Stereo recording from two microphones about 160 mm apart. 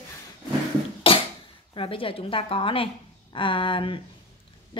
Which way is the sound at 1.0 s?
35° left (ahead or behind).